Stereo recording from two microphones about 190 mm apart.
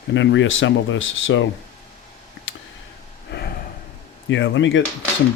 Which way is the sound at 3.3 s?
60° left (ahead or behind).